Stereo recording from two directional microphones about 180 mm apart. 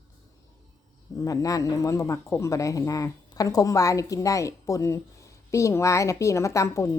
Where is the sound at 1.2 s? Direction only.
20° left (ahead or behind).